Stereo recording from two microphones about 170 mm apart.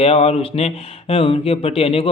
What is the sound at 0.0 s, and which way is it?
Speech, 35° left (ahead or behind).